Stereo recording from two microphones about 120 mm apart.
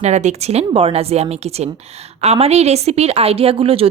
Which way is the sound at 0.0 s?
75° right (ahead or behind).